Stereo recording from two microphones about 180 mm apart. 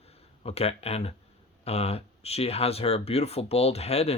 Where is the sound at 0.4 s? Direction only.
35° left (ahead or behind).